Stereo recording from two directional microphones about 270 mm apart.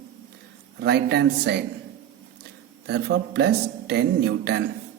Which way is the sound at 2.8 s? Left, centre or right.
Right.